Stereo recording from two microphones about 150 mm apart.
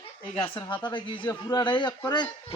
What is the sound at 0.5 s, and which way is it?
A man's voice, 30° left (ahead or behind).